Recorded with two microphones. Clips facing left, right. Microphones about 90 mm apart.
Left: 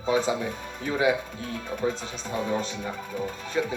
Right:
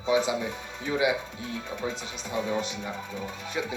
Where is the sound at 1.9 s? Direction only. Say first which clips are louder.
Left 1 dB; 40° left (ahead or behind).